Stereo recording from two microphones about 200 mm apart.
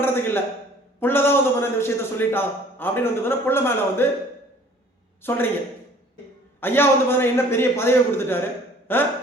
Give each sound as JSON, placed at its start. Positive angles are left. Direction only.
{"t": 0.0, "sound": "a sound", "side_deg": 10}
{"t": 0.9, "sound": "a man's voice", "side_deg": 10}
{"t": 5.2, "sound": "a man's voice", "side_deg": 10}
{"t": 6.6, "sound": "a man's voice", "side_deg": 10}